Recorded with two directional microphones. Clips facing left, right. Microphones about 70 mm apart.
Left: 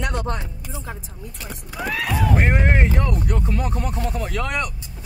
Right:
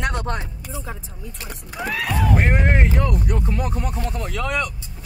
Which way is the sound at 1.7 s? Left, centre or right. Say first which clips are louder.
Even; centre.